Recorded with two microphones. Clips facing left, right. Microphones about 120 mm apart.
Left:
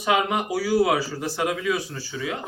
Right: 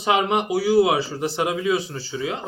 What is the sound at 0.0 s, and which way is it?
Speech, 25° right (ahead or behind).